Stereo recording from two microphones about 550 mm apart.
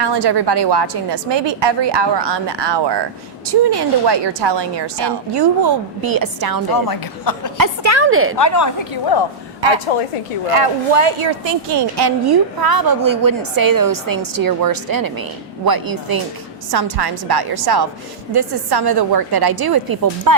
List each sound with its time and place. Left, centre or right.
0.0 s a woman's voice: right
6.7 s a man's voice: left
7.6 s a sound: right
8.4 s a man's voice: left
9.9 s a woman's voice: left
10.5 s a woman's voice: right